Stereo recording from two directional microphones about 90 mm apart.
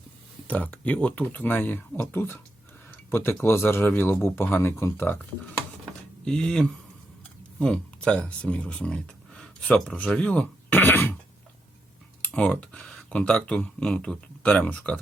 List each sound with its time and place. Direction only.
0.4 s speech: 15° left (ahead or behind)
6.2 s speech: 10° left (ahead or behind)
12.2 s speech: 15° left (ahead or behind)